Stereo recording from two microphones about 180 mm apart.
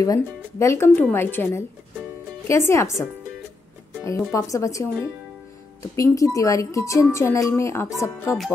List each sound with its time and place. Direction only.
0.0 s a woman's voice: 20° left (ahead or behind)